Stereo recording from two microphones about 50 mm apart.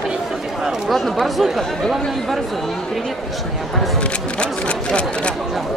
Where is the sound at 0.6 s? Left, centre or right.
Centre.